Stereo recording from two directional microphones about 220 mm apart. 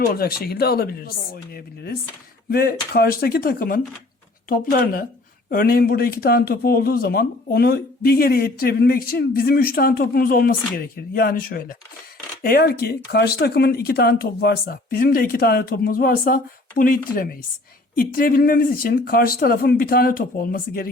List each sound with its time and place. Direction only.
0.0 s speech: 45° left (ahead or behind)